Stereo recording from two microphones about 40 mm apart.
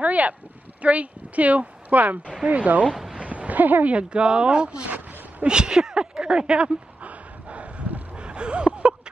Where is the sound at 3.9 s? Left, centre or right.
Right.